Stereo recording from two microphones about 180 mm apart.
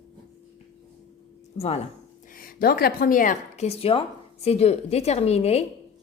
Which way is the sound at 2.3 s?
55° left (ahead or behind).